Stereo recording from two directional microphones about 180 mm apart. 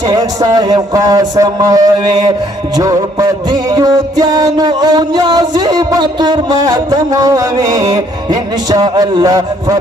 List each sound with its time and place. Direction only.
0.1 s music: 20° right (ahead or behind)